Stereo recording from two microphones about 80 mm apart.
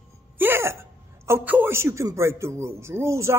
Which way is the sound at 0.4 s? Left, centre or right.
Right.